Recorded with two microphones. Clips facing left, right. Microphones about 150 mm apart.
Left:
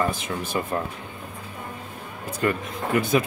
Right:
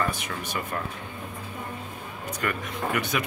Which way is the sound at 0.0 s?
25° left (ahead or behind).